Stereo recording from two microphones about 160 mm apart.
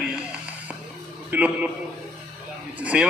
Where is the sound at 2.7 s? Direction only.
10° right (ahead or behind).